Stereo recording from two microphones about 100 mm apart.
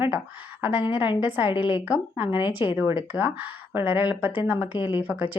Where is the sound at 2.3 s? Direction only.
55° left (ahead or behind).